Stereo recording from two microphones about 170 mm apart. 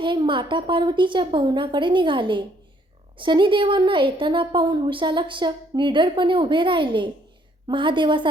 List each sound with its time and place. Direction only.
0.0 s a woman's voice: 30° right (ahead or behind)